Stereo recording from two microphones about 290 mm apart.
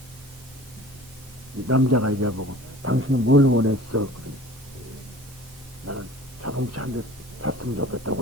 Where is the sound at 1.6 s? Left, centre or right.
Right.